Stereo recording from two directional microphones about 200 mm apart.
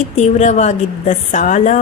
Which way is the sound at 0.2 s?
35° left (ahead or behind).